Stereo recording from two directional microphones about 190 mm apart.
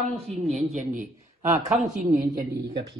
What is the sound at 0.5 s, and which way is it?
Speech, 35° right (ahead or behind).